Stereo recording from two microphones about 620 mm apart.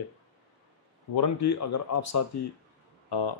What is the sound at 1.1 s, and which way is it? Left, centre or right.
Speech, left.